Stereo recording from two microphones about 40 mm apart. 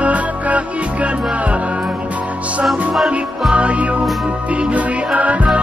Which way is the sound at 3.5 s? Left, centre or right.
Right.